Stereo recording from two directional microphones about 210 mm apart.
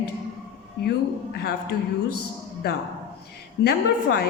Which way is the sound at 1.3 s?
45° left (ahead or behind).